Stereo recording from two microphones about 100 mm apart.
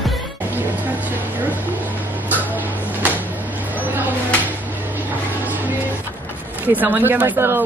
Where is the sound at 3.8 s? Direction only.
15° right (ahead or behind).